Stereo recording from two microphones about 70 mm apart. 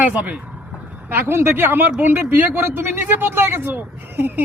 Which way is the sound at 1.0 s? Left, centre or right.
Right.